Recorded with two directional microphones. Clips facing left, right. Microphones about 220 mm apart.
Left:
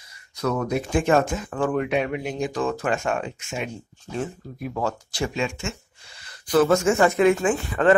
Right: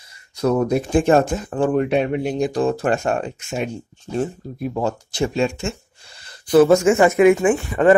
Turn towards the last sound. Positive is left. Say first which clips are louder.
# right 5 dB
turn(degrees=-15)  # may be behind; listen again after turning